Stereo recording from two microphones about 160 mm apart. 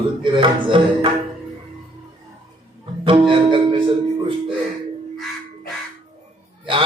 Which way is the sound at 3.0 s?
30° right (ahead or behind).